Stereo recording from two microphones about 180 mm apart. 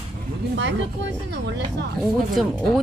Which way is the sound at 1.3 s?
75° right (ahead or behind).